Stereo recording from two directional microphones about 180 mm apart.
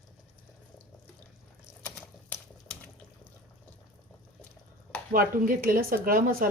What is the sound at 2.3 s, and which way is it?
Typewriter, 10° left (ahead or behind).